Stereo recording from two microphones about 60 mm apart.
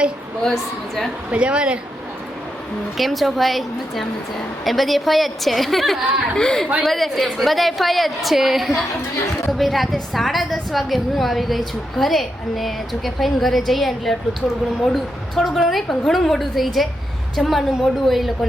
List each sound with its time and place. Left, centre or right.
0.4 s a woman's voice: centre
1.3 s a woman's voice: centre
3.0 s a woman's voice: centre